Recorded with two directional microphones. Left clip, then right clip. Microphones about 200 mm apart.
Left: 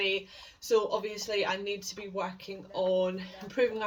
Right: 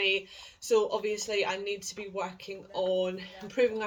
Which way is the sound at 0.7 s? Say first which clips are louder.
Right 1 dB; centre (ahead or behind).